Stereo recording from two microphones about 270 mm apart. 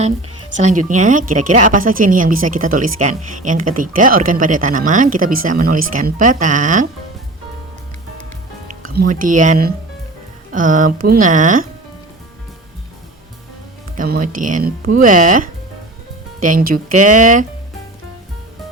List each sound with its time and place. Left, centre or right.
0.0 s speech: right
9.0 s speech: right
13.9 s speech: right